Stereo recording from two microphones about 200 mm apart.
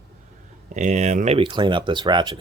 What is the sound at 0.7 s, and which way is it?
Speech, 35° right (ahead or behind).